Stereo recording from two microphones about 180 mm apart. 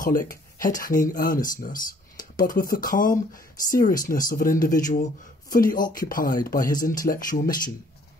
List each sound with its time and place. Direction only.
0.0 s speech: 50° left (ahead or behind)